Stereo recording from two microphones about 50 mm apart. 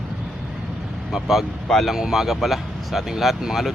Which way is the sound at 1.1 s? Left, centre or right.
Centre.